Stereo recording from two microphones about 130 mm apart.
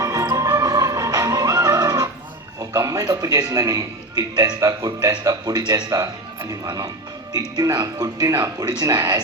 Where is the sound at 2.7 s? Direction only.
25° right (ahead or behind).